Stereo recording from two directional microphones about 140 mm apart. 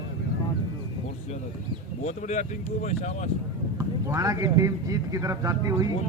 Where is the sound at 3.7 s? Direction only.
20° right (ahead or behind).